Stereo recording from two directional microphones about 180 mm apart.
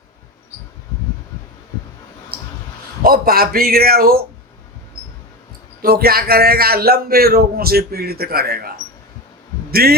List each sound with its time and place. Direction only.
3.0 s a man's voice: 55° right (ahead or behind)
5.8 s a man's voice: 55° right (ahead or behind)
9.7 s a man's voice: 60° right (ahead or behind)